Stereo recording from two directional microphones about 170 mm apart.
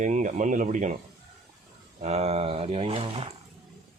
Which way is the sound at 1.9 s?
40° right (ahead or behind).